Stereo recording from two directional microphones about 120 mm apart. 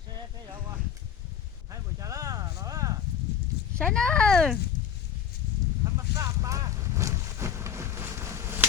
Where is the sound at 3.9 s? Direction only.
10° left (ahead or behind).